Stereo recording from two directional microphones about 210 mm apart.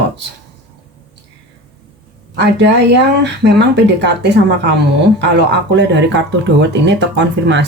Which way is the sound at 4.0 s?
55° right (ahead or behind).